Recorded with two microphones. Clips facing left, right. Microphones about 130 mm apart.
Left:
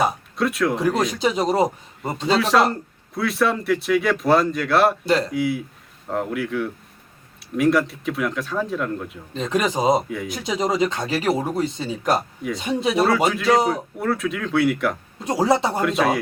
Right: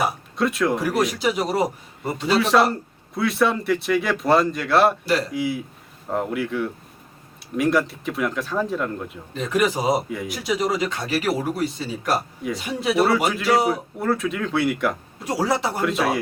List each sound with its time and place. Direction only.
0.3 s speech: centre (ahead or behind)
1.1 s speech: 25° left (ahead or behind)
2.3 s speech: centre (ahead or behind)
9.3 s speech: 25° left (ahead or behind)
13.0 s speech: 5° right (ahead or behind)
15.2 s speech: 20° left (ahead or behind)
15.8 s speech: centre (ahead or behind)